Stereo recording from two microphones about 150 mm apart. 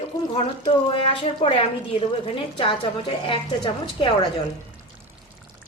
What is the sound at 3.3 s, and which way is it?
A woman's voice, 35° left (ahead or behind).